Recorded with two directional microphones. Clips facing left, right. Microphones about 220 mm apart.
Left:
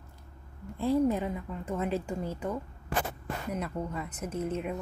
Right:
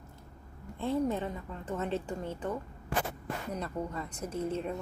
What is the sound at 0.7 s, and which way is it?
A woman's voice, 10° left (ahead or behind).